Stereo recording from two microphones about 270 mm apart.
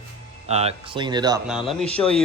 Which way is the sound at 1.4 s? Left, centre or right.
Centre.